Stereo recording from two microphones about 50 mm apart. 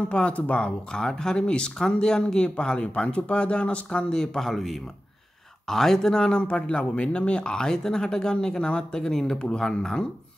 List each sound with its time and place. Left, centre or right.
0.1 s speech: left
4.2 s a man's voice: centre